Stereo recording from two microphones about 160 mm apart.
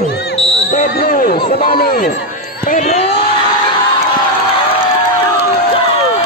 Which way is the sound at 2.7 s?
45° left (ahead or behind).